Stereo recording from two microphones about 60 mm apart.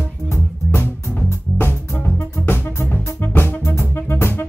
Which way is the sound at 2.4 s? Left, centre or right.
Left.